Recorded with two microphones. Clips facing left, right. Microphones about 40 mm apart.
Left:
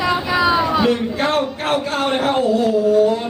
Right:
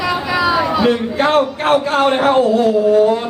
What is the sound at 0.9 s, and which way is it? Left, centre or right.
Speech, centre.